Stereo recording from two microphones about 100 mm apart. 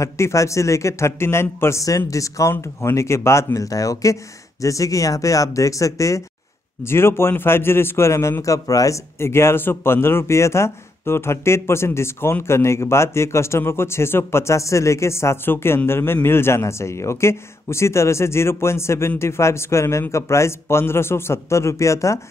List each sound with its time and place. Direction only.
0.0 s a man's voice: 30° left (ahead or behind)